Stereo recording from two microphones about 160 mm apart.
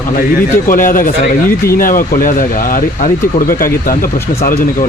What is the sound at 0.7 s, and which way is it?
Speech, 60° left (ahead or behind).